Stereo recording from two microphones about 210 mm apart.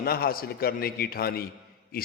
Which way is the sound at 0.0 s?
45° left (ahead or behind).